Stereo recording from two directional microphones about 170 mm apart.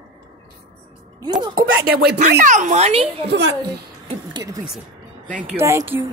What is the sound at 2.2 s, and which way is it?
Speech, 45° right (ahead or behind).